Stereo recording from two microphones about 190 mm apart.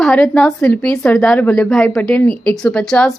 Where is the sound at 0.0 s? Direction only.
5° left (ahead or behind).